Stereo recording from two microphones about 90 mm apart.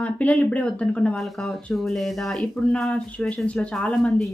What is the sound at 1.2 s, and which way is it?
Speech, centre (ahead or behind).